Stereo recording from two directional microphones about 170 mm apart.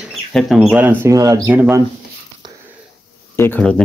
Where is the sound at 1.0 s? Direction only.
20° right (ahead or behind).